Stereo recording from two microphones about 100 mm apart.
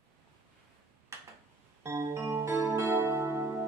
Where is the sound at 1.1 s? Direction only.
30° right (ahead or behind).